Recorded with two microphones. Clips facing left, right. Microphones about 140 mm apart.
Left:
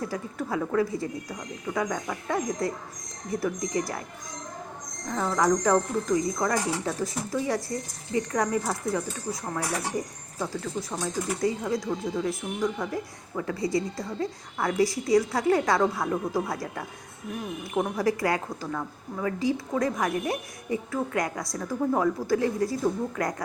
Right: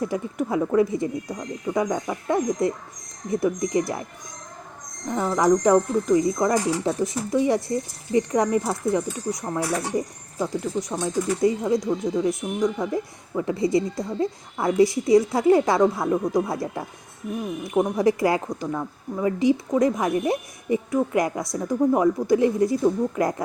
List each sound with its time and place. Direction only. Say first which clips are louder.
0.0 s speech: right 6 dB; 20° right (ahead or behind)
5.1 s speech: right 4 dB; 15° right (ahead or behind)